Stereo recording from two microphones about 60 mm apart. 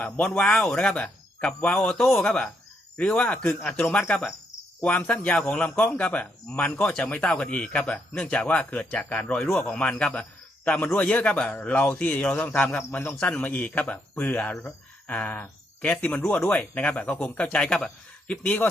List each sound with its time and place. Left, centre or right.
0.0 s speech: centre
2.0 s speech: centre
2.2 s a man's voice: centre
5.2 s a man's voice: centre